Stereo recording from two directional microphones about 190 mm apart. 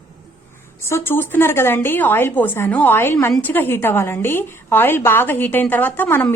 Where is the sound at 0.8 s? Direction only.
15° left (ahead or behind).